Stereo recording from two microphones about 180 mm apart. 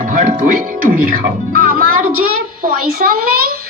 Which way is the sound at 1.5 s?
55° right (ahead or behind).